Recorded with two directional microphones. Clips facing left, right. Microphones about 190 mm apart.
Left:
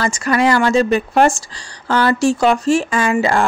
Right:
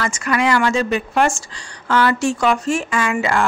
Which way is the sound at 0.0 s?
35° left (ahead or behind).